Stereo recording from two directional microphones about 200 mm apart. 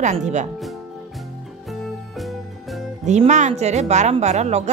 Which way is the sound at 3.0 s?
35° right (ahead or behind).